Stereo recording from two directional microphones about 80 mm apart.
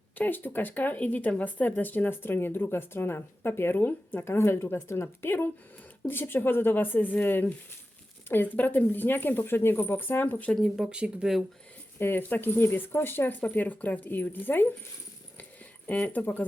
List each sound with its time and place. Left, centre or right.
0.2 s speech: left
10.8 s speech: centre
11.9 s speech: left
15.9 s speech: left